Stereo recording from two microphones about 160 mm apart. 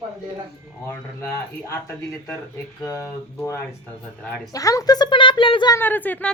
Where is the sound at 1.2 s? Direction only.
20° left (ahead or behind).